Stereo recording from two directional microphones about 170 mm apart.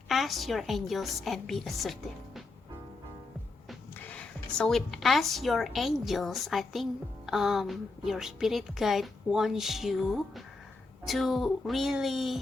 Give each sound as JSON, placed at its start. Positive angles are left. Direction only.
{"t": 0.1, "sound": "a woman's voice", "side_deg": 0}
{"t": 3.7, "sound": "a woman's voice", "side_deg": 5}